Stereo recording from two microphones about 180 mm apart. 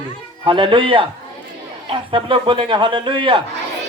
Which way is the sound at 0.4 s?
30° right (ahead or behind).